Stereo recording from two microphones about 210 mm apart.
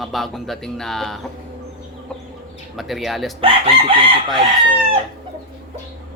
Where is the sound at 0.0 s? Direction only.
Centre (ahead or behind).